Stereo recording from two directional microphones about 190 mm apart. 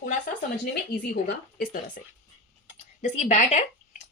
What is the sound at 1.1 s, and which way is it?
Speech, 50° left (ahead or behind).